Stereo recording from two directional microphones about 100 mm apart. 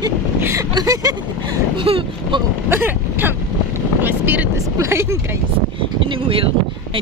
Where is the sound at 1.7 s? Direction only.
60° right (ahead or behind).